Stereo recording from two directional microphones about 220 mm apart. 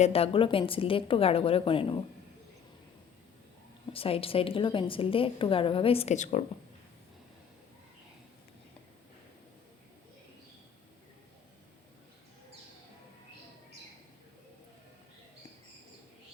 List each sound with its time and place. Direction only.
0.0 s a woman's voice: 25° left (ahead or behind)
3.9 s a woman's voice: 25° left (ahead or behind)